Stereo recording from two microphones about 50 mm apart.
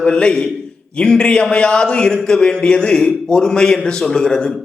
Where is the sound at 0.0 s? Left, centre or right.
Centre.